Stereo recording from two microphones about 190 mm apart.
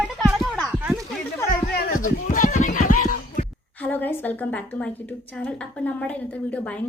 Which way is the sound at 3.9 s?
10° left (ahead or behind).